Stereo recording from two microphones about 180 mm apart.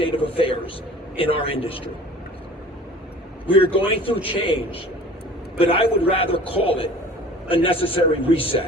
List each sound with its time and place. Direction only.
0.0 s a man's voice: 30° left (ahead or behind)
3.4 s a man's voice: 30° left (ahead or behind)